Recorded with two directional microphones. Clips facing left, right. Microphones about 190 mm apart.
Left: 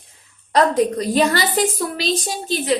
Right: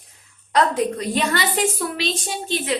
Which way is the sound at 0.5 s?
35° left (ahead or behind).